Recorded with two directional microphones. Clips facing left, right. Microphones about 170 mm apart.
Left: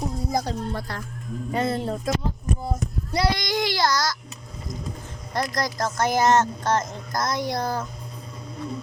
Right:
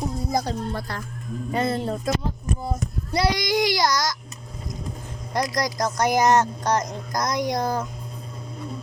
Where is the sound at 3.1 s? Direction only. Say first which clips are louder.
Right 2 dB; 10° right (ahead or behind).